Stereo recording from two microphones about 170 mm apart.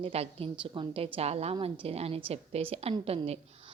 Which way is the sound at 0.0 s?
35° right (ahead or behind).